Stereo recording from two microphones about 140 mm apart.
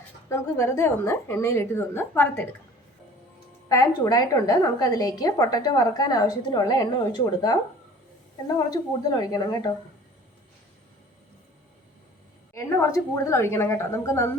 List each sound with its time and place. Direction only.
0.3 s a woman's voice: 20° left (ahead or behind)
3.7 s a woman's voice: 25° left (ahead or behind)
12.5 s a woman's voice: 20° left (ahead or behind)